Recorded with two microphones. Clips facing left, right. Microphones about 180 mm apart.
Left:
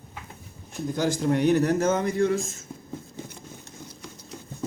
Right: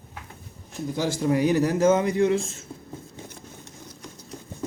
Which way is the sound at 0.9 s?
5° right (ahead or behind).